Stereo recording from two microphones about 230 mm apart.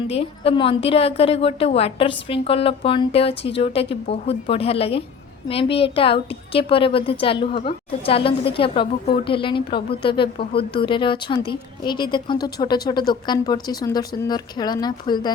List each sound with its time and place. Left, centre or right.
0.1 s a woman's voice: left